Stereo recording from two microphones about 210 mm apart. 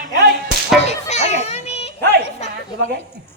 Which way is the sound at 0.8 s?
30° left (ahead or behind).